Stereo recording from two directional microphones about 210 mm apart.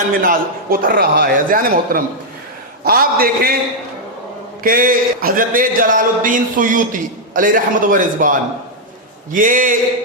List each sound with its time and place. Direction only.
0.2 s a man's voice: 40° right (ahead or behind)
4.6 s speech: 40° right (ahead or behind)